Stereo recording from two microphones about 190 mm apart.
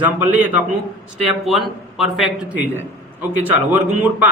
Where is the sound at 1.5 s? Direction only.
Centre (ahead or behind).